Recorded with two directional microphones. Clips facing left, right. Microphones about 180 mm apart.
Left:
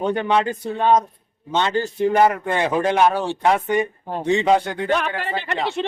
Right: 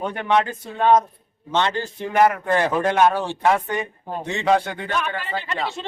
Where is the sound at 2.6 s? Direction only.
15° left (ahead or behind).